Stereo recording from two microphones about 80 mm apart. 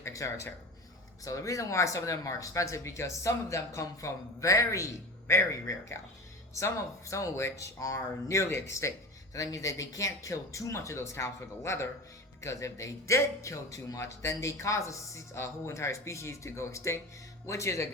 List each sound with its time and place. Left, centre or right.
0.0 s speech: left